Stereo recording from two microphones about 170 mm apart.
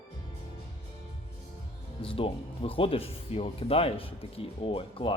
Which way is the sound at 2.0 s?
35° left (ahead or behind).